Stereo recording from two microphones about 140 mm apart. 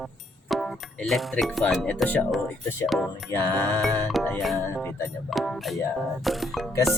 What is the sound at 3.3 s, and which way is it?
Speech, 10° left (ahead or behind).